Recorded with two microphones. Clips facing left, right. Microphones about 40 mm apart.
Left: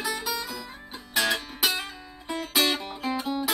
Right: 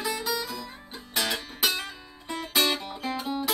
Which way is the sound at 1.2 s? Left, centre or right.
Centre.